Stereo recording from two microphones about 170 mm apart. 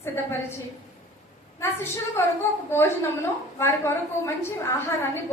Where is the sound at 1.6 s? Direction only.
15° left (ahead or behind).